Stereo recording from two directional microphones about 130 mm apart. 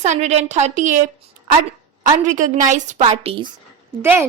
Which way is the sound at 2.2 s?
80° right.